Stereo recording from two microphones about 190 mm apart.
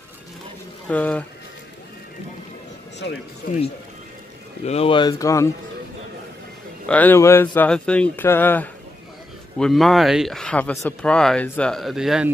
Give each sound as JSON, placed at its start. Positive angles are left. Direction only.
{"t": 0.8, "sound": "speech", "side_deg": 5}
{"t": 3.4, "sound": "speech", "side_deg": 50}
{"t": 4.6, "sound": "speech", "side_deg": 30}
{"t": 6.9, "sound": "speech", "side_deg": 10}